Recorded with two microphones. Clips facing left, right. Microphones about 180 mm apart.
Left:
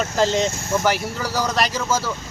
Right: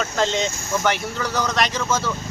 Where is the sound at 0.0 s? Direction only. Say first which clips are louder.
Left 3 dB; 5° left (ahead or behind).